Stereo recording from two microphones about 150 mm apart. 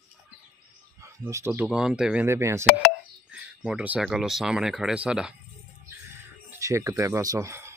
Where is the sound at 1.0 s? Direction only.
20° right (ahead or behind).